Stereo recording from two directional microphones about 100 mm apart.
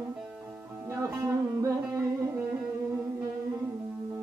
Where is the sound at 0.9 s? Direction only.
30° right (ahead or behind).